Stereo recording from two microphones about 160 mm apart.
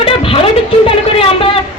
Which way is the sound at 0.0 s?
35° left (ahead or behind).